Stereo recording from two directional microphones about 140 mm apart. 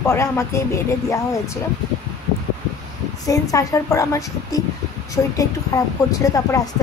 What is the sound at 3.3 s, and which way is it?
A woman's voice, 25° left (ahead or behind).